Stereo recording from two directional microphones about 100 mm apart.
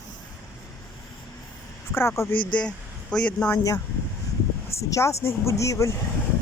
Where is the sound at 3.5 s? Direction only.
35° left (ahead or behind).